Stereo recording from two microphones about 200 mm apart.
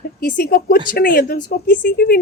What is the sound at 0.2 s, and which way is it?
A woman's voice, 50° left (ahead or behind).